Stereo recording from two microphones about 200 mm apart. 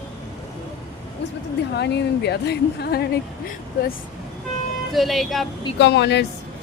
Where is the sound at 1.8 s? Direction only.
55° left (ahead or behind).